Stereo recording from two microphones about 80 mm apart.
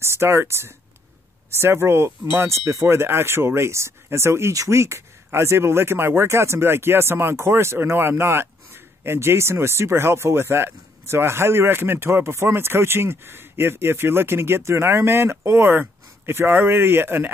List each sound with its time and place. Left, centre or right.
0.0 s speech: right